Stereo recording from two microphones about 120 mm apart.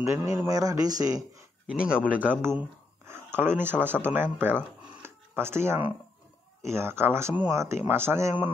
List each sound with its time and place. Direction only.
0.0 s speech: 25° right (ahead or behind)
1.7 s speech: 5° right (ahead or behind)